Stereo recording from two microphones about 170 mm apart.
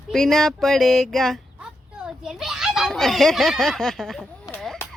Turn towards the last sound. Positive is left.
turn(degrees=5)  # may be behind; listen again after turning